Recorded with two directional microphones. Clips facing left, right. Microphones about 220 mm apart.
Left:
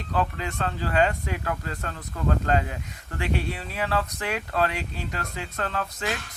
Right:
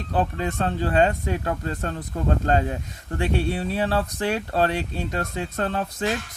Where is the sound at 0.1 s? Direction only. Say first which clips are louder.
Right 3 dB; 30° right (ahead or behind).